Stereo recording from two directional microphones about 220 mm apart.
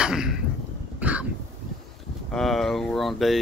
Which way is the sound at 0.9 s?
5° right (ahead or behind).